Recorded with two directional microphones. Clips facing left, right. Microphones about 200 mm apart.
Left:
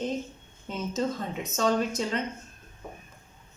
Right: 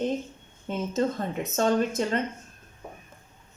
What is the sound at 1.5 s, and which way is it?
Speech, 55° right (ahead or behind).